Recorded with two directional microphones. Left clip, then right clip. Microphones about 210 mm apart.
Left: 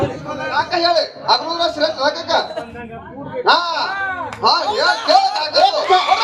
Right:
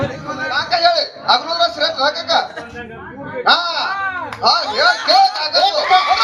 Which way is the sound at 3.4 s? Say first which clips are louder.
Even; 50° left (ahead or behind).